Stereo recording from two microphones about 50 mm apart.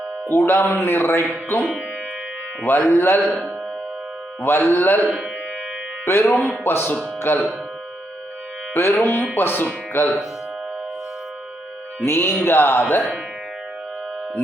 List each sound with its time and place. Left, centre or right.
0.3 s speech: left
4.4 s speech: left
6.1 s speech: left
6.3 s speech: left
6.7 s speech: left
8.7 s speech: left
11.9 s speech: left